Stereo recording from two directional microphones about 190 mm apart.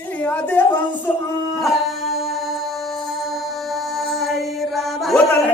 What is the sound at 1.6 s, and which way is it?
Music, centre (ahead or behind).